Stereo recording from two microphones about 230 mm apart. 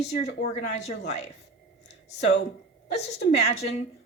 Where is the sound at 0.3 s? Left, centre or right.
Left.